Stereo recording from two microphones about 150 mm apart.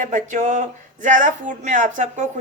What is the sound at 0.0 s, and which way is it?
Speech, 55° right (ahead or behind).